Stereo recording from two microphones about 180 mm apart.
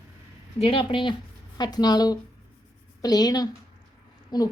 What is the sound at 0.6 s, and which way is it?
A woman's voice, 30° left (ahead or behind).